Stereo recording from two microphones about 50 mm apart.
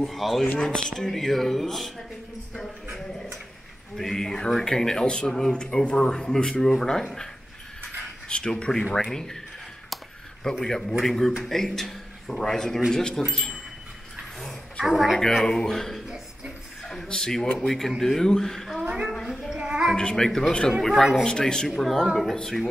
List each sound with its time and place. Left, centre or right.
0.0 s speech: centre
0.6 s speech: centre
3.9 s speech: centre
8.3 s speech: centre
10.4 s a man's voice: centre
14.9 s speech: centre
15.1 s speech: centre
18.9 s a woman's voice: centre
19.5 s child singing: centre
20.0 s speech: centre
21.2 s speech: centre
21.6 s speech: centre